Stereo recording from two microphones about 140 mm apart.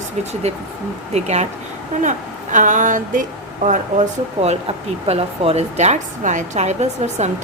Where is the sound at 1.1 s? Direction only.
50° right (ahead or behind).